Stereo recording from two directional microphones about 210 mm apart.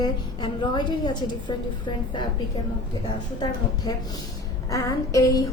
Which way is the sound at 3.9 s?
20° left (ahead or behind).